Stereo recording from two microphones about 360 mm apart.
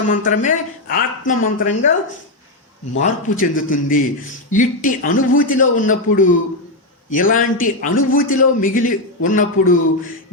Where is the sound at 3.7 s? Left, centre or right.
Left.